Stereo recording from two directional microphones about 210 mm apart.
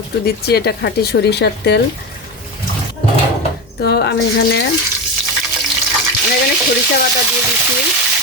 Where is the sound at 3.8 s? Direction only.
50° left (ahead or behind).